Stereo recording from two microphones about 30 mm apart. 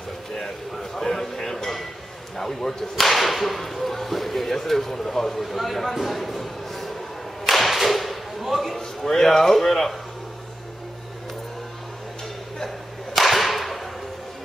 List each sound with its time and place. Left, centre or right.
0.9 s a sound: centre
2.3 s speech: centre
3.0 s speech: centre
7.4 s whip: centre
8.7 s speech: centre
12.6 s whip: centre